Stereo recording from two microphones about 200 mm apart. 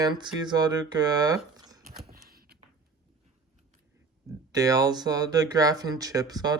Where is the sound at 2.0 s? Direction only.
50° right (ahead or behind).